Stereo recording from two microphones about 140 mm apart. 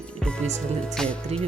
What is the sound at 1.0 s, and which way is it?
Speech, 5° left (ahead or behind).